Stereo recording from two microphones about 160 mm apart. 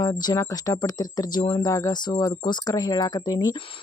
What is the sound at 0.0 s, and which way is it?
Speech, 25° left (ahead or behind).